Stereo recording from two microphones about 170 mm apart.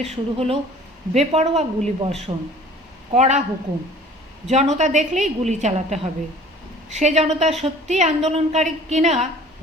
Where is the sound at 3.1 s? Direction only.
40° right (ahead or behind).